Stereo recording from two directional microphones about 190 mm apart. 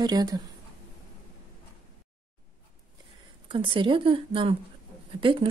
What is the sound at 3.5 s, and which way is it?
Speech, 25° right (ahead or behind).